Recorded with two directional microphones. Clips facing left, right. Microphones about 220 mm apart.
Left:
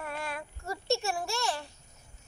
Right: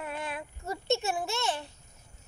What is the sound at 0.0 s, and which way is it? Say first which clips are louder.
Child singing: right 1 dB; 20° right (ahead or behind).